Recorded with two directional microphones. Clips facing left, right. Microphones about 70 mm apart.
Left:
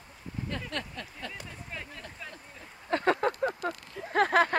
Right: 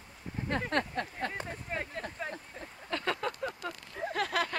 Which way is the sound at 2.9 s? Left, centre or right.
Left.